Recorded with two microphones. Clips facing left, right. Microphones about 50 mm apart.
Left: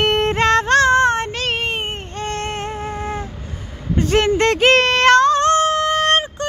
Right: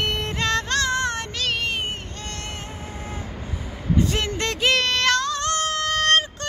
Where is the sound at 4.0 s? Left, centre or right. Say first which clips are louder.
Left 9 dB; left.